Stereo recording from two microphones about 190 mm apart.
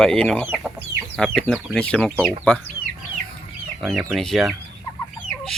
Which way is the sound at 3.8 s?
Centre (ahead or behind).